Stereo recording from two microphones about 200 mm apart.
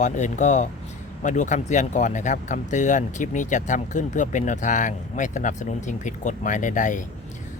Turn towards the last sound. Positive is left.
turn(degrees=40)  # may be behind; listen again after turning